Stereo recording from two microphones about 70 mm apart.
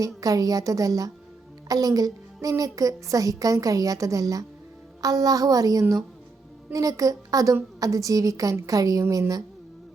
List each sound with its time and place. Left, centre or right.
0.0 s a child's voice: right